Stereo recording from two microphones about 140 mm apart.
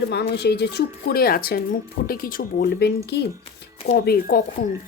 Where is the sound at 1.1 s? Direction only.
90° left.